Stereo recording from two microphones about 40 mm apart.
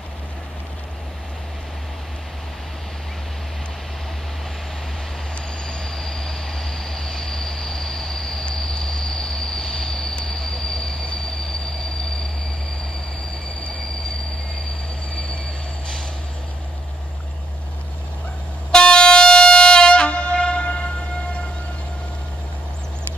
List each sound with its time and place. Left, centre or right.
5.7 s train: centre
8.5 s vehicle: centre
10.2 s train: centre
18.7 s music: left